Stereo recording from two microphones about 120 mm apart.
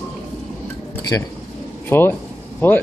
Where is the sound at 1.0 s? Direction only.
25° left (ahead or behind).